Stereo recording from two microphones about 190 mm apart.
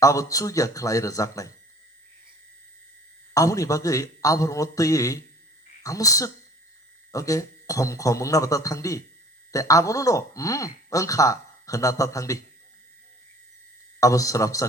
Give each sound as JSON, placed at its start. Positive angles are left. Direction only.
{"t": 0.0, "sound": "speech", "side_deg": 15}
{"t": 3.3, "sound": "speech", "side_deg": 15}
{"t": 14.0, "sound": "speech", "side_deg": 15}